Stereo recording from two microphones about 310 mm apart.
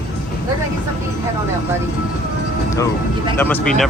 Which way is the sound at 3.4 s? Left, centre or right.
Centre.